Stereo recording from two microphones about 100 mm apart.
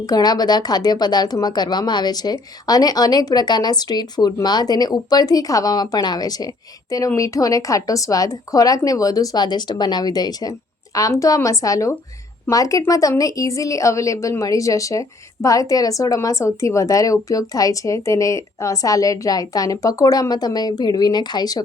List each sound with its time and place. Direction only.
0.0 s a woman's voice: 40° left (ahead or behind)